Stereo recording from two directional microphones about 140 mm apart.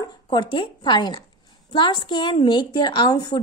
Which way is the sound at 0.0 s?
35° left (ahead or behind).